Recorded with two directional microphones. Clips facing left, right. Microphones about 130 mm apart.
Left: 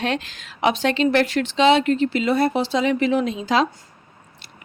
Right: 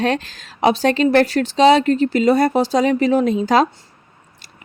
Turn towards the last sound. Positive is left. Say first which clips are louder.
# right 5 dB
turn(degrees=-45)  # may be behind; listen again after turning